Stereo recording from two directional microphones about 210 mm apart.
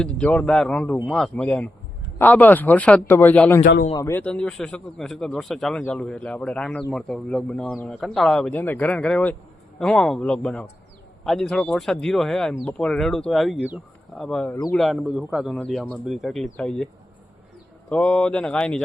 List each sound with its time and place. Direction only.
0.0 s a man's voice: 5° left (ahead or behind)
14.5 s a man's voice: 15° left (ahead or behind)
14.8 s a man's voice: centre (ahead or behind)